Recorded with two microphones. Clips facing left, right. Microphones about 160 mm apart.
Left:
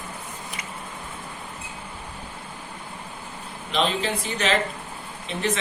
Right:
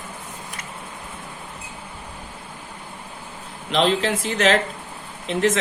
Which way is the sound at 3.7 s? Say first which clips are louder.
Right 5 dB; 90° right.